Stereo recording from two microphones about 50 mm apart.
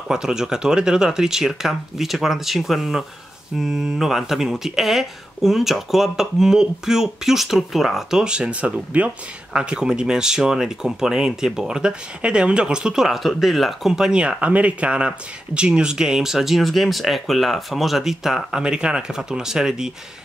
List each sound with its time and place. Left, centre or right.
0.1 s speech: centre
8.2 s speech: centre
13.9 s speech: centre
18.6 s speech: centre